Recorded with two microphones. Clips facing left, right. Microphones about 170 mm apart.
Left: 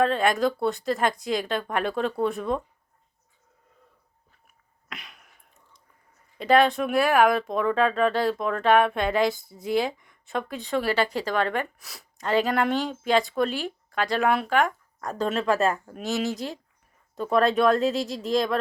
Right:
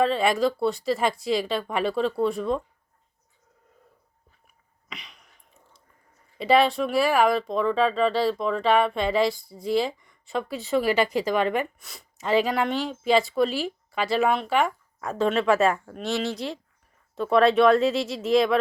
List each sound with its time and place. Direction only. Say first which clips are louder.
0.0 s speech: even; centre (ahead or behind)
4.9 s a sound: left 1 dB; centre (ahead or behind)
6.4 s speech: even; centre (ahead or behind)
11.8 s speech: even; centre (ahead or behind)